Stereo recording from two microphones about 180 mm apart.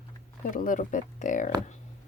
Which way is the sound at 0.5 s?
45° left (ahead or behind).